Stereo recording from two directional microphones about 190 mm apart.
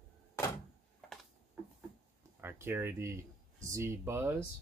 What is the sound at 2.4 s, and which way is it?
Speech, 10° right (ahead or behind).